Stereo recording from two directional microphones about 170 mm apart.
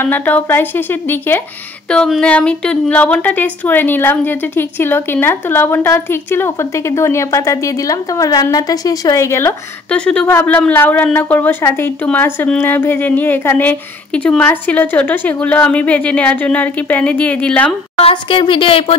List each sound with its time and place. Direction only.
0.0 s a woman's voice: 10° left (ahead or behind)
17.9 s a woman's voice: 35° left (ahead or behind)